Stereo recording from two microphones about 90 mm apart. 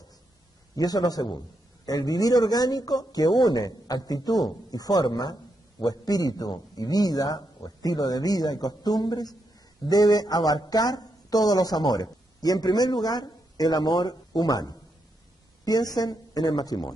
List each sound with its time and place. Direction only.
0.7 s speech: 45° left (ahead or behind)